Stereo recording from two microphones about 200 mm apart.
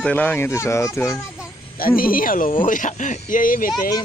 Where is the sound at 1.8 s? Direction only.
45° left (ahead or behind).